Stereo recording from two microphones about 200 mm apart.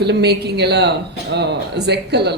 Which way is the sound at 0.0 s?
55° right (ahead or behind).